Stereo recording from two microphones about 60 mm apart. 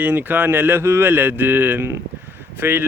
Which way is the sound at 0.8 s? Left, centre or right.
Right.